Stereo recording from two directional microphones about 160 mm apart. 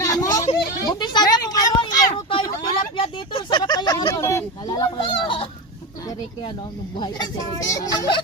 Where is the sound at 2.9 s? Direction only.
35° left (ahead or behind).